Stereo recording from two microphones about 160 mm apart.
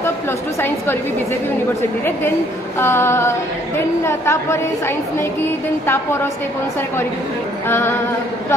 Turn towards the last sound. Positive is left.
turn(degrees=15)  # may be behind; listen again after turning